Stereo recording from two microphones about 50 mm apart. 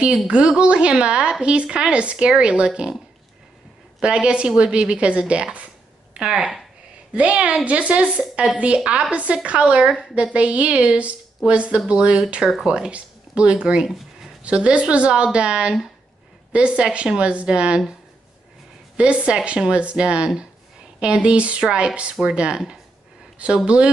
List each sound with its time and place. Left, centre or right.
0.5 s a woman's voice: right
4.0 s a woman's voice: centre
18.9 s a woman's voice: right